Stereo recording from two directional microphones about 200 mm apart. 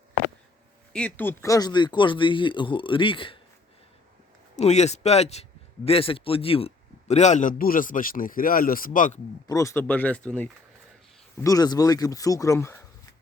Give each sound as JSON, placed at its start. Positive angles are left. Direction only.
{"t": 0.9, "sound": "speech", "side_deg": 10}
{"t": 4.5, "sound": "speech", "side_deg": 35}
{"t": 9.5, "sound": "speech", "side_deg": 15}